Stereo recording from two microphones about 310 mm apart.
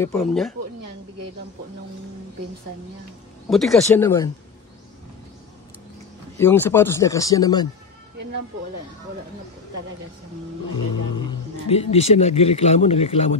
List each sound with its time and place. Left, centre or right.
0.0 s speech: centre
3.4 s speech: centre
6.3 s speech: centre
11.1 s speech: centre